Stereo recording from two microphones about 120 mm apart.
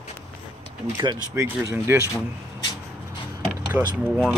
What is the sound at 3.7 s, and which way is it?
Speech, 15° right (ahead or behind).